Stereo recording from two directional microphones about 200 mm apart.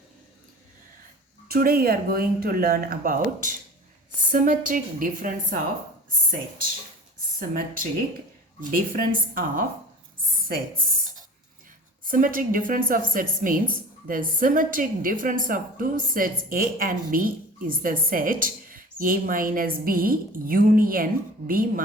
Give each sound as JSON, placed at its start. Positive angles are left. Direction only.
{"t": 1.5, "sound": "a woman's voice", "side_deg": -50}
{"t": 7.3, "sound": "a woman's voice", "side_deg": -45}
{"t": 12.0, "sound": "a woman's voice", "side_deg": -45}